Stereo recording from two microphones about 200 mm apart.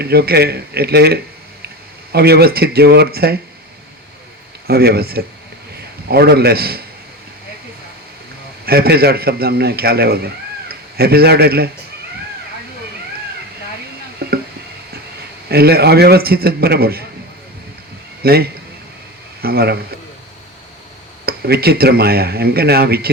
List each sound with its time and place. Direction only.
0.0 s speech: 50° right (ahead or behind)
4.7 s a man's voice: 50° right (ahead or behind)
8.6 s speech: 50° right (ahead or behind)
14.2 s a sound: 50° right (ahead or behind)
15.4 s speech: 50° right (ahead or behind)
18.2 s a man's voice: 50° right (ahead or behind)
21.2 s speech: 50° right (ahead or behind)